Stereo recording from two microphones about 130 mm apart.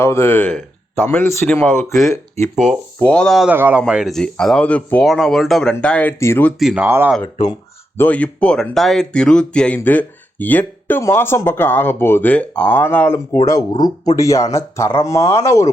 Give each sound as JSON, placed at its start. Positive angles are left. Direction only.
{"t": 0.0, "sound": "speech", "side_deg": 20}
{"t": 2.0, "sound": "speech", "side_deg": 25}
{"t": 3.0, "sound": "speech", "side_deg": 10}
{"t": 3.5, "sound": "speech", "side_deg": -15}
{"t": 5.0, "sound": "speech", "side_deg": 0}
{"t": 6.6, "sound": "speech", "side_deg": -5}
{"t": 6.8, "sound": "speech", "side_deg": -20}
{"t": 7.9, "sound": "speech", "side_deg": 10}
{"t": 13.3, "sound": "speech", "side_deg": 25}